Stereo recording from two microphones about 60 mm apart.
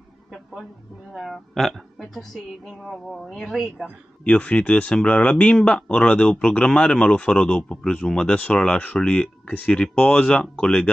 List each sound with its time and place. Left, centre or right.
1.1 s a woman's voice: centre
3.3 s a woman's voice: centre
4.2 s speech: left